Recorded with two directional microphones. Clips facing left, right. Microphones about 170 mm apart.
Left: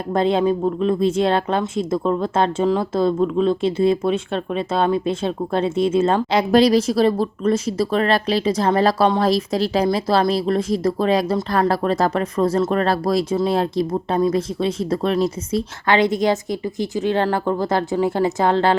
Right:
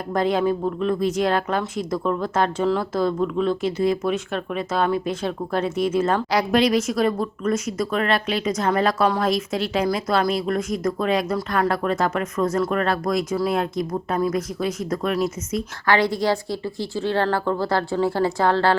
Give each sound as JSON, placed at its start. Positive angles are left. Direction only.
{"t": 0.1, "sound": "speech", "side_deg": 25}
{"t": 6.5, "sound": "speech", "side_deg": 35}